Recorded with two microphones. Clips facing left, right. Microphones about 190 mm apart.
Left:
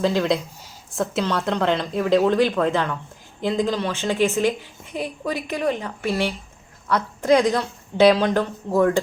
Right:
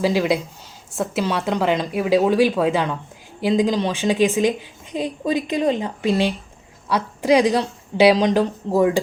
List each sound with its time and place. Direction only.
0.0 s a woman's voice: 10° right (ahead or behind)